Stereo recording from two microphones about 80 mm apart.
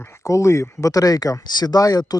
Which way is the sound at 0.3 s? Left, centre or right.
Left.